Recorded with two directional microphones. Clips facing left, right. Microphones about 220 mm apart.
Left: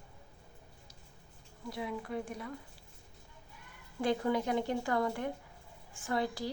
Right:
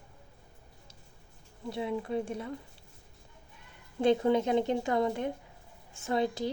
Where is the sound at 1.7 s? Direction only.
25° right (ahead or behind).